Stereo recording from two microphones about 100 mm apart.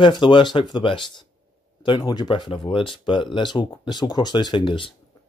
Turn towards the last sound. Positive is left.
turn(degrees=55)  # may be behind; listen again after turning